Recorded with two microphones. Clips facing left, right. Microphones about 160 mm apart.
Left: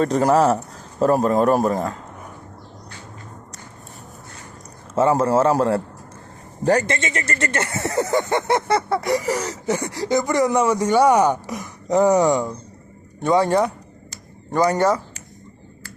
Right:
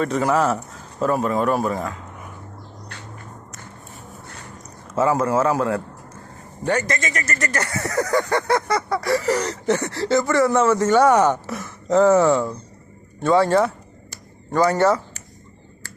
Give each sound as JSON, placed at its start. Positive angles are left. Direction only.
{"t": 0.0, "sound": "a man's voice", "side_deg": 40}
{"t": 4.9, "sound": "a man's voice", "side_deg": 30}